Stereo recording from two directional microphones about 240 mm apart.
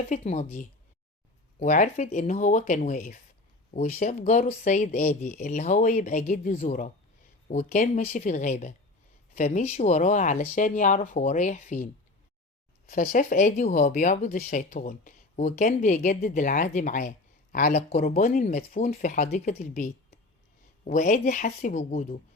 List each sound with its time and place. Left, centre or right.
0.1 s speech: left
12.9 s speech: left